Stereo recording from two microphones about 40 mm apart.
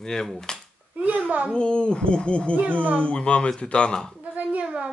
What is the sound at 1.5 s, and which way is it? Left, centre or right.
Speech, left.